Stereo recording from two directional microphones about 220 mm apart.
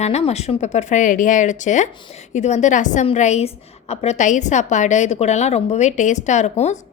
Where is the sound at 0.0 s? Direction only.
30° left (ahead or behind).